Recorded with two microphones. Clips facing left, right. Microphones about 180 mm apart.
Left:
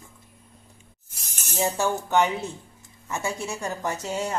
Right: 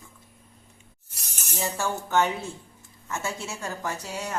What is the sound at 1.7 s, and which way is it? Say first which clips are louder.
A woman's voice: left 1 dB; 15° left (ahead or behind).